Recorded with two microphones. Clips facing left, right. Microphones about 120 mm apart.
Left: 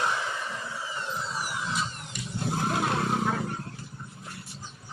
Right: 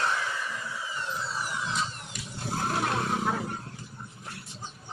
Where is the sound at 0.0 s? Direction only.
20° left (ahead or behind).